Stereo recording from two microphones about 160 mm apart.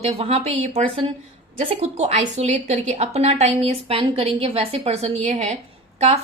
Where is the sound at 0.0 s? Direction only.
40° right (ahead or behind).